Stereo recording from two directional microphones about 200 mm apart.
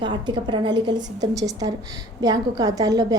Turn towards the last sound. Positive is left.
turn(degrees=-20)  # may be behind; listen again after turning